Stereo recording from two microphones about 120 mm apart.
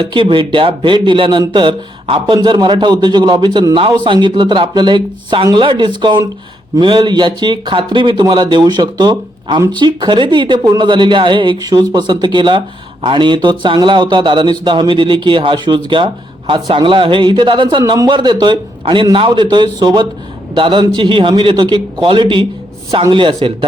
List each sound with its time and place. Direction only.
0.0 s a man's voice: 45° right (ahead or behind)